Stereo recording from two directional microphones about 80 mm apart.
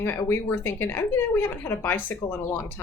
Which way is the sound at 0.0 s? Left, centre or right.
Left.